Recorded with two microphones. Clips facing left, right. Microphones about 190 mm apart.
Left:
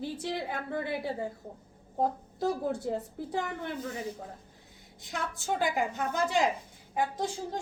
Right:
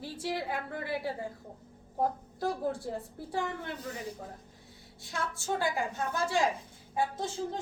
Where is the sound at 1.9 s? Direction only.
20° left (ahead or behind).